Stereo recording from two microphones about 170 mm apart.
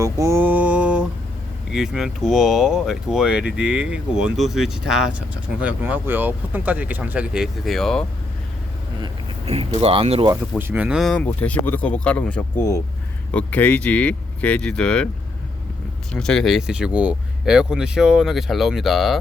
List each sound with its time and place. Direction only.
0.0 s mantra: 15° right (ahead or behind)
1.7 s speech: 5° right (ahead or behind)
9.5 s speech: 35° right (ahead or behind)
10.6 s speech: 10° right (ahead or behind); by 15.1 s 5° left (ahead or behind)
16.1 s speech: 5° left (ahead or behind)